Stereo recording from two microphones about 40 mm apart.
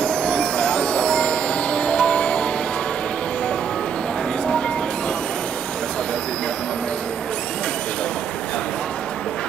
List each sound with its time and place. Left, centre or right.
0.0 s music: left